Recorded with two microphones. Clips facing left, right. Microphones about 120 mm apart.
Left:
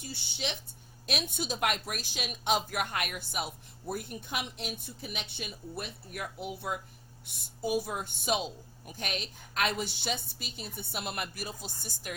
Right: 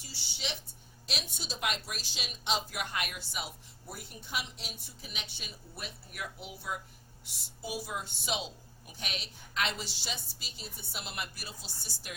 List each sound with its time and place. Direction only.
0.0 s a woman's voice: 55° left (ahead or behind)